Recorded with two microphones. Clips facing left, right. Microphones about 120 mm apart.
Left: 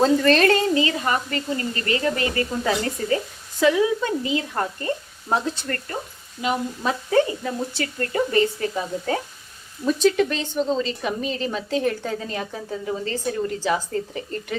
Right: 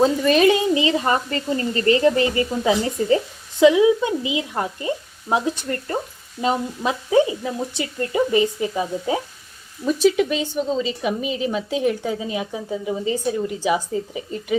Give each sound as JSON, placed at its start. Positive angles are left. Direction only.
{"t": 0.0, "sound": "a woman's voice", "side_deg": -10}
{"t": 6.8, "sound": "a woman's voice", "side_deg": -15}